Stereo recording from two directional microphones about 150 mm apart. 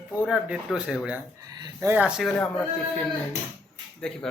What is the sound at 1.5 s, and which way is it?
Speech, 25° right (ahead or behind).